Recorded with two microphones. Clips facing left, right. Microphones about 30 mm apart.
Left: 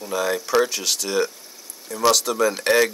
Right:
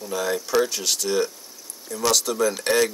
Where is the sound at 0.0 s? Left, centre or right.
Centre.